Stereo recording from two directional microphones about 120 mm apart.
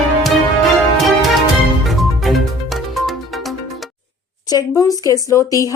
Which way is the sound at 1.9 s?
Centre (ahead or behind).